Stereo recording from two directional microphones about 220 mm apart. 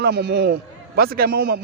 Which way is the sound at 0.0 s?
50° right (ahead or behind).